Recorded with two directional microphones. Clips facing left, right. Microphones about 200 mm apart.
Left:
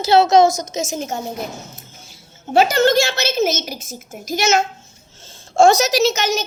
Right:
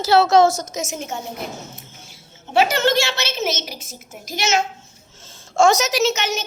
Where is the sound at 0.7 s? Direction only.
35° left (ahead or behind).